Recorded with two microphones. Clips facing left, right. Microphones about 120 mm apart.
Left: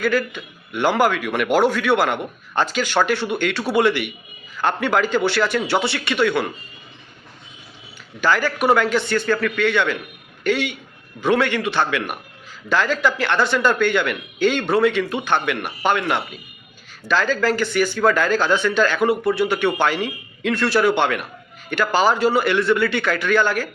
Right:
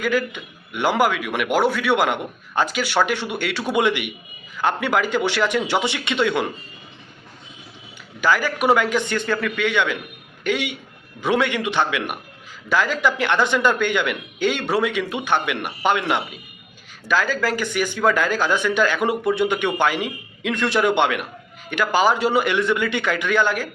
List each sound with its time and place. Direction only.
0.0 s speech: 15° right (ahead or behind)
8.2 s speech: 10° right (ahead or behind)